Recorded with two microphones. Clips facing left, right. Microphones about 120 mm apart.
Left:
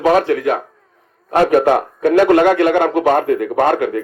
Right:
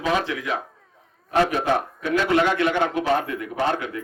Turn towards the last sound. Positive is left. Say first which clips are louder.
# left 9 dB
turn(degrees=55)  # may be behind; listen again after turning